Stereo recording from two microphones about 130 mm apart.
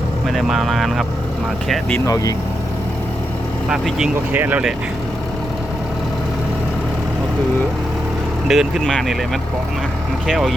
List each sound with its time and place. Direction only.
0.3 s speech: centre (ahead or behind)
2.0 s speech: 25° left (ahead or behind)
3.7 s speech: 5° right (ahead or behind)
8.4 s speech: centre (ahead or behind)